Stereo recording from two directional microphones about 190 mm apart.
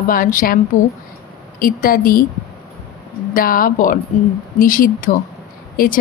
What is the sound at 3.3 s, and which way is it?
Speech, 50° left (ahead or behind).